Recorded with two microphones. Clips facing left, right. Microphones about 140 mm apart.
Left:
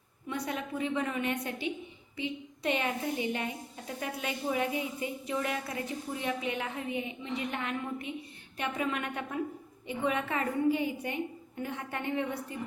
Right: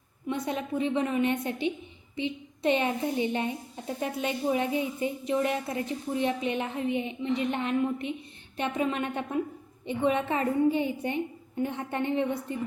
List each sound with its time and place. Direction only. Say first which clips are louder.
0.3 s a woman's voice: right 4 dB; 25° right (ahead or behind)